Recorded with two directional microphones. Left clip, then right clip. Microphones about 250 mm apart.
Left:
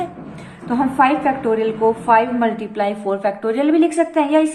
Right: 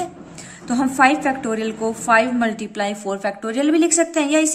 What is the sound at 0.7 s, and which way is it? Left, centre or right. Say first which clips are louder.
A woman's voice: left 1 dB; right.